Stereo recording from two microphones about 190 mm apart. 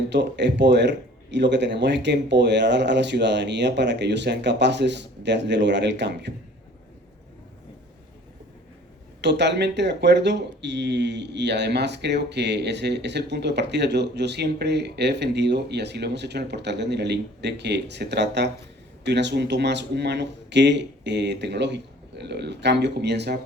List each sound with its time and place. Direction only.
0.1 s speech: 65° right (ahead or behind)
9.2 s speech: 65° right (ahead or behind)